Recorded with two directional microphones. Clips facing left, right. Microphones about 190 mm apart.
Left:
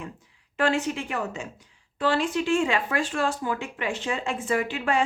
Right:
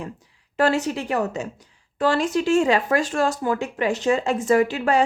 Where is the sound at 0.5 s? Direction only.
40° right (ahead or behind).